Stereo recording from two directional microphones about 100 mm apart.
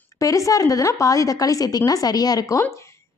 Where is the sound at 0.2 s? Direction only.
35° left (ahead or behind).